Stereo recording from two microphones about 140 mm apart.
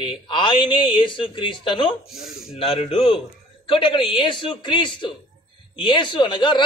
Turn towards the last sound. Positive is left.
turn(degrees=35)  # may be behind; listen again after turning